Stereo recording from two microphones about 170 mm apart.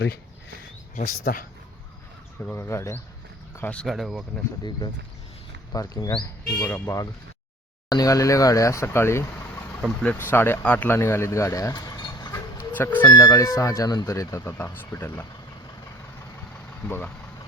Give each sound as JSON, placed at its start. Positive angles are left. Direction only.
{"t": 0.9, "sound": "speech", "side_deg": 50}
{"t": 2.4, "sound": "speech", "side_deg": 10}
{"t": 5.7, "sound": "speech", "side_deg": 20}
{"t": 6.6, "sound": "speech", "side_deg": 10}
{"t": 16.8, "sound": "speech", "side_deg": 10}